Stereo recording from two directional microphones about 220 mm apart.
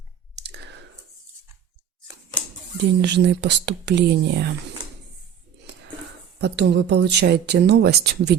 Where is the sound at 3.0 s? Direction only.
50° right (ahead or behind).